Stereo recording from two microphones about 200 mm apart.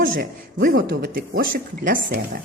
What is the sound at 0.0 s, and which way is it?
Speech, 45° right (ahead or behind).